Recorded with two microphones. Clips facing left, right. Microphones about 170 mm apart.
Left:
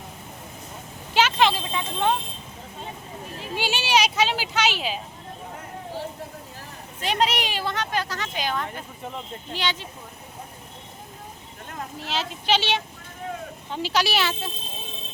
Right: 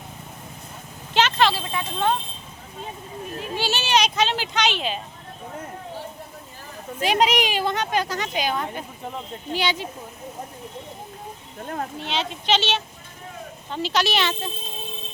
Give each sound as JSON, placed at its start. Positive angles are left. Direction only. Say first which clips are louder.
{"t": 1.1, "sound": "vehicle", "louder": "even", "side_deg": 10}
{"t": 3.6, "sound": "speech", "louder": "even", "side_deg": 10}
{"t": 7.0, "sound": "speech", "louder": "right 4 dB", "side_deg": -10}
{"t": 11.9, "sound": "speech", "louder": "right 2 dB", "side_deg": 5}